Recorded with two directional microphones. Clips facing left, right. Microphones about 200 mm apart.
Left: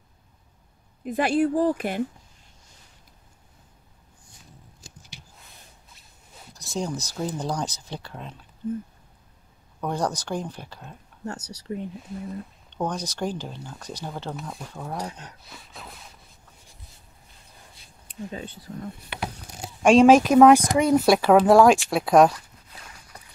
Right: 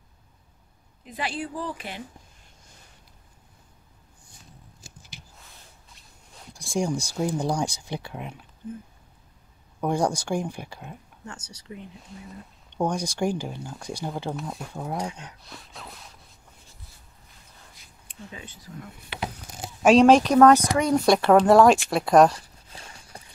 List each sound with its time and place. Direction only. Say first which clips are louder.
1.0 s speech: left 10 dB; 50° left (ahead or behind)
6.5 s speech: right 3 dB; 10° right (ahead or behind)
9.8 s speech: right 3 dB; 10° right (ahead or behind)
11.5 s speech: left 8 dB; 45° left (ahead or behind)
12.7 s speech: right 3 dB; 10° right (ahead or behind)
14.3 s speech: right 2 dB; centre (ahead or behind)
15.4 s a sound: right 1 dB; centre (ahead or behind)
17.7 s speech: left 9 dB; 35° left (ahead or behind)
19.8 s speech: left 1 dB; centre (ahead or behind)
22.3 s walk: right 1 dB; 30° right (ahead or behind)